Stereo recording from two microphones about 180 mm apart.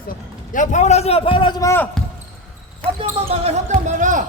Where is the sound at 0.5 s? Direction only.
40° left (ahead or behind); by 2.0 s 10° left (ahead or behind).